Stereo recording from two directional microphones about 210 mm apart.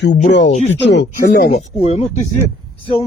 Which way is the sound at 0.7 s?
55° left (ahead or behind).